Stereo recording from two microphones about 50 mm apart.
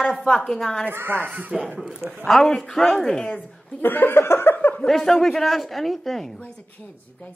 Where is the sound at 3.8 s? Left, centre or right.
Left.